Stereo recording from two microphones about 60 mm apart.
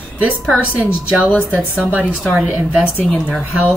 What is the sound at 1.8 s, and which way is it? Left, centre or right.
A woman's voice, right.